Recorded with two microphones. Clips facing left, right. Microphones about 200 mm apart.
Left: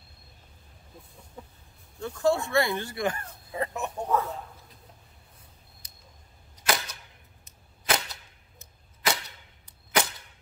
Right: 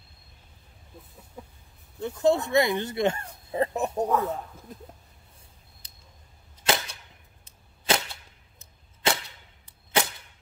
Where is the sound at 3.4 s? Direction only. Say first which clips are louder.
Right 6 dB; 30° right (ahead or behind).